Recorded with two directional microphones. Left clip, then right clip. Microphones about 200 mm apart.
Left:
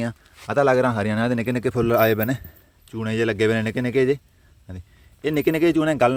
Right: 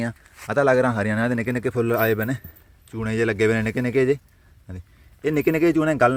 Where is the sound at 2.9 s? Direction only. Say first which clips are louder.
Even; centre (ahead or behind).